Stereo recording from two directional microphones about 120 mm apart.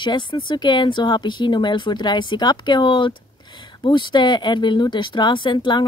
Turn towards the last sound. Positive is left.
turn(degrees=40)  # may be behind; listen again after turning